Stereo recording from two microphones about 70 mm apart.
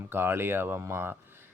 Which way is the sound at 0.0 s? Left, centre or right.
Right.